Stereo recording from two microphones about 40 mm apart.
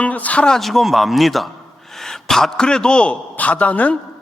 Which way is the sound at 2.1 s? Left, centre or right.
Centre.